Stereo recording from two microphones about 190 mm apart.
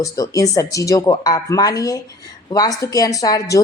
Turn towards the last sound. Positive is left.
turn(degrees=20)  # may be behind; listen again after turning